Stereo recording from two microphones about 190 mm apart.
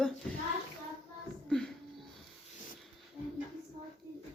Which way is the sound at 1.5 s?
Centre (ahead or behind).